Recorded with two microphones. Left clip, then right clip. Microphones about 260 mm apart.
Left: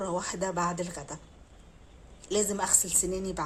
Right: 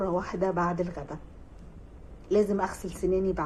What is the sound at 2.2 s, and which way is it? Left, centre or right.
Speech, left.